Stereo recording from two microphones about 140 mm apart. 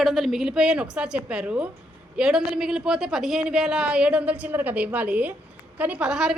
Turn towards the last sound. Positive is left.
turn(degrees=-5)  # may be behind; listen again after turning